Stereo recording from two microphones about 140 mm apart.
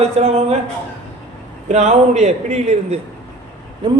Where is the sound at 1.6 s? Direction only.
55° right (ahead or behind).